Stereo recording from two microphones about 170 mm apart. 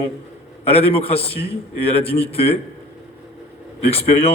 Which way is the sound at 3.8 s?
35° left (ahead or behind).